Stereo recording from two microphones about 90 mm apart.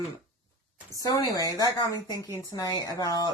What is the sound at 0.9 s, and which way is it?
Speech, 40° left (ahead or behind).